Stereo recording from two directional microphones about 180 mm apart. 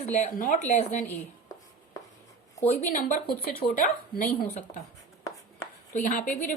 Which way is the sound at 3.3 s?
55° left (ahead or behind).